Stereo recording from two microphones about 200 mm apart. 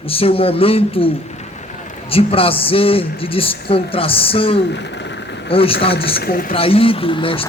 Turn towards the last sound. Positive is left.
turn(degrees=25)  # may be behind; listen again after turning